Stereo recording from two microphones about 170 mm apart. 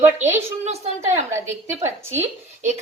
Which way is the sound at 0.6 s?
40° right (ahead or behind).